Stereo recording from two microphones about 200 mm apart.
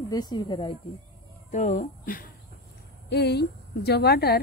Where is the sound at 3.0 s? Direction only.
55° left (ahead or behind).